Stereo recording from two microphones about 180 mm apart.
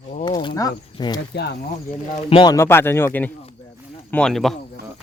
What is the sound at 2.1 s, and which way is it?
Speech, 30° left (ahead or behind).